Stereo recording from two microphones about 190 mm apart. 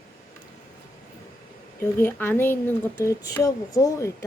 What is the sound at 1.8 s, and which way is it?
Speech, 10° left (ahead or behind).